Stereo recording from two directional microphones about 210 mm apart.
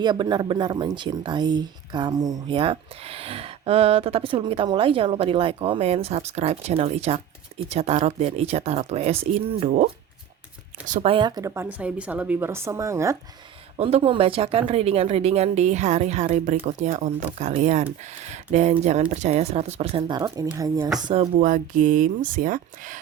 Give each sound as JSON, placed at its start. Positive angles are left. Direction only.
{"t": 0.0, "sound": "speech", "side_deg": -20}
{"t": 11.1, "sound": "speech", "side_deg": -20}
{"t": 13.7, "sound": "speech", "side_deg": -30}
{"t": 21.3, "sound": "speech", "side_deg": -40}